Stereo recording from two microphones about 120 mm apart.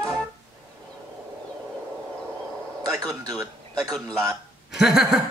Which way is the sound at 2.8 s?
30° right (ahead or behind).